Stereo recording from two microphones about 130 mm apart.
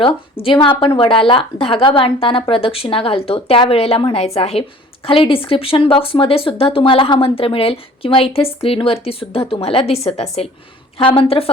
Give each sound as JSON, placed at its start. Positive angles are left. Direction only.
{"t": 0.0, "sound": "speech", "side_deg": 45}